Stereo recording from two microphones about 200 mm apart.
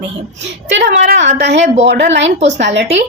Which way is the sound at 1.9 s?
55° right (ahead or behind).